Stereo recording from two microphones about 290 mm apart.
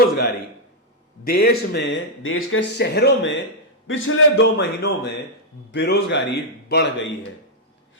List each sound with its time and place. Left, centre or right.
1.2 s speech: left